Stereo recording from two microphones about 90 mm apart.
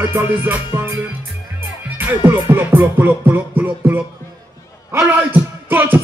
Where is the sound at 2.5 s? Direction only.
20° right (ahead or behind).